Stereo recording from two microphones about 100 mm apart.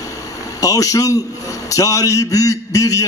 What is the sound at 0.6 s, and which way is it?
A man's voice, 35° left (ahead or behind).